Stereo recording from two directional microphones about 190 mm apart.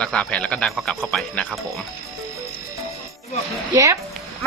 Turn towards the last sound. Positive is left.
turn(degrees=-15)  # may be behind; listen again after turning